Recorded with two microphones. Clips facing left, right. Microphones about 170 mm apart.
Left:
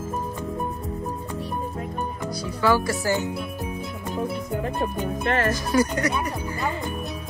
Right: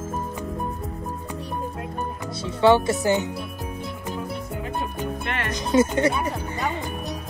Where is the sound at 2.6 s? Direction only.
25° right (ahead or behind).